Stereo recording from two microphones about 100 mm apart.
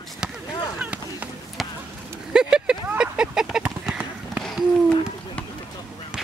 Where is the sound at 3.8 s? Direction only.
5° right (ahead or behind).